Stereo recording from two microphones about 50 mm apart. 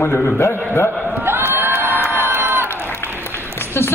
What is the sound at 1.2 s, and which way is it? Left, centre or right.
Crowd, right.